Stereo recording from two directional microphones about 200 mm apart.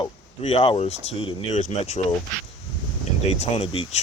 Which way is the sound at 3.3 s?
30° left (ahead or behind).